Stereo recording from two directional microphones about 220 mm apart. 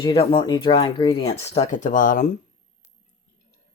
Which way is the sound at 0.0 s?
25° left (ahead or behind).